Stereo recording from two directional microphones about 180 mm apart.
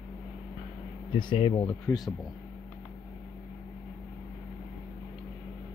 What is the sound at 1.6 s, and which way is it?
Speech, 5° left (ahead or behind).